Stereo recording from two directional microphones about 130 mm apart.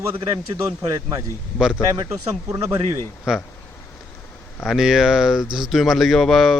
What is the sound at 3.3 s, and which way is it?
Speech, 5° right (ahead or behind).